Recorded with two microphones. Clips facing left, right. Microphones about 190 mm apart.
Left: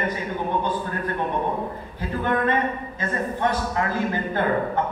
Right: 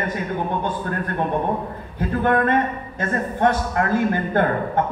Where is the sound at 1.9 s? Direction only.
55° right (ahead or behind).